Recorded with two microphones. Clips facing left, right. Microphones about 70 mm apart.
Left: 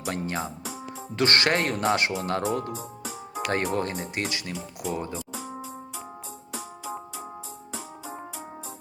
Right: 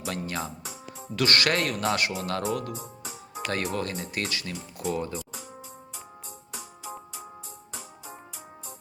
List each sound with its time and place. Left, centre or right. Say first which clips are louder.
0.0 s speech: left 2 dB; left